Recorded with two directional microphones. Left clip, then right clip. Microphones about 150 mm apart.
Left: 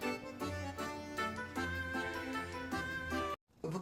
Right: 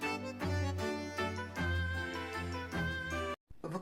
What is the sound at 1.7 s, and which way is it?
Music, 10° left (ahead or behind).